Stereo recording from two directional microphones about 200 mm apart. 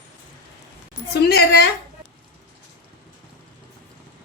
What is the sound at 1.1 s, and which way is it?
Speech, 55° left (ahead or behind).